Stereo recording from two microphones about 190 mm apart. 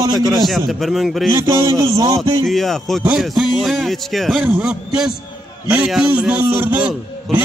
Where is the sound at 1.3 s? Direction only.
15° right (ahead or behind).